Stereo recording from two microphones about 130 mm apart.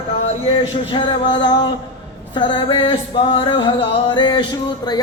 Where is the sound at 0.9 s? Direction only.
35° left (ahead or behind).